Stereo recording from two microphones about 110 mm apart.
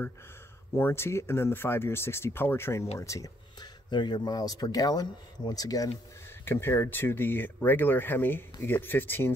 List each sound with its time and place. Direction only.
0.7 s speech: 20° left (ahead or behind)
3.9 s speech: 40° left (ahead or behind)
6.4 s speech: 20° left (ahead or behind)